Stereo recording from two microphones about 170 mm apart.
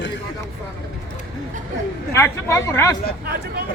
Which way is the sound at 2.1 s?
15° left (ahead or behind).